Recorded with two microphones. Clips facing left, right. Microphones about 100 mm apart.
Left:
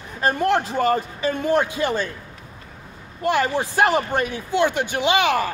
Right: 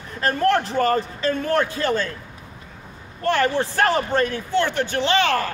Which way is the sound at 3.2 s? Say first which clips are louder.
Right 1 dB; 15° left (ahead or behind).